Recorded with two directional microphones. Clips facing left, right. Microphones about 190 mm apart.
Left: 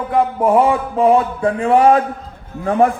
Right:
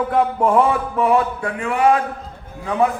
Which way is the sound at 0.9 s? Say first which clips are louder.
Left 4 dB; 25° left (ahead or behind).